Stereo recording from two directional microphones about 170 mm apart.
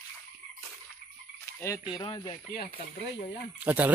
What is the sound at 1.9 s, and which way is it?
Speech, 25° left (ahead or behind).